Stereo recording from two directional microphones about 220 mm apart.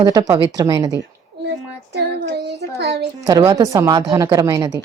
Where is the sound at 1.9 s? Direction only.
50° right (ahead or behind).